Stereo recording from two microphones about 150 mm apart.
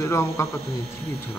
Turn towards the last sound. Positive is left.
turn(degrees=20)  # may be behind; listen again after turning